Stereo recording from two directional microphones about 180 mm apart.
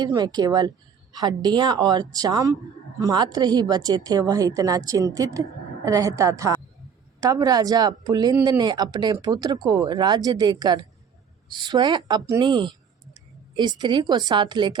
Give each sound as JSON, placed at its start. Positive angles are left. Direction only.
{"t": 0.0, "sound": "a woman's voice", "side_deg": -25}